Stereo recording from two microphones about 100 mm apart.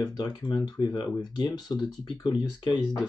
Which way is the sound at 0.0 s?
40° left (ahead or behind).